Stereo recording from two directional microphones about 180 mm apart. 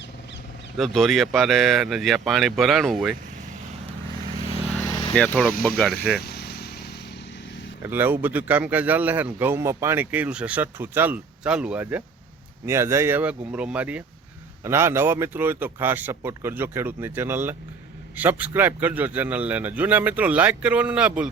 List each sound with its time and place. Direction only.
0.8 s speech: centre (ahead or behind)
4.8 s vehicle: 20° left (ahead or behind)
5.1 s speech: 5° left (ahead or behind)
6.1 s vehicle: 60° left (ahead or behind)
7.8 s a man's voice: 10° right (ahead or behind)